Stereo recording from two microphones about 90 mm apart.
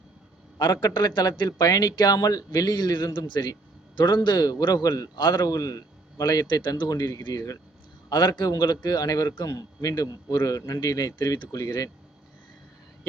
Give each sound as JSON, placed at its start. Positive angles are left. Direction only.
{"t": 0.6, "sound": "a man's voice", "side_deg": 50}